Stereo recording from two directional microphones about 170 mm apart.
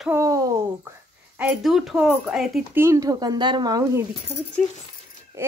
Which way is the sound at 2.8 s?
20° right (ahead or behind).